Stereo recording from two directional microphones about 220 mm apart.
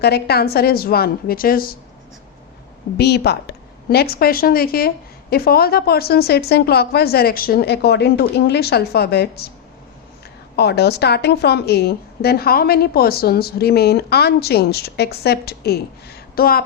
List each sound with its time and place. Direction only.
0.0 s a woman's voice: 45° left (ahead or behind)
3.0 s a woman's voice: 50° left (ahead or behind)
10.6 s a woman's voice: 45° left (ahead or behind)
16.3 s a sound: 45° left (ahead or behind)